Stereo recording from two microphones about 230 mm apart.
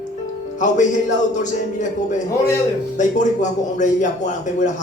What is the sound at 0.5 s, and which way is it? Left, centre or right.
Speech, left.